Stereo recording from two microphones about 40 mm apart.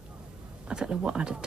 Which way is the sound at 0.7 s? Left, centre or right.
Right.